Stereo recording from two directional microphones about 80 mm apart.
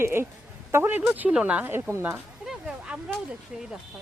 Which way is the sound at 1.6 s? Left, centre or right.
Right.